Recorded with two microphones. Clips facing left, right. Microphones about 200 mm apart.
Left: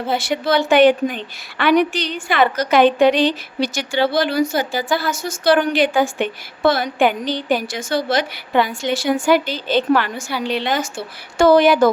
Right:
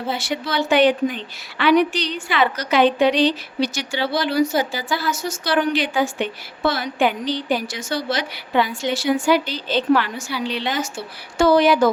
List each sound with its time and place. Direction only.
0.1 s a woman's voice: 50° left (ahead or behind)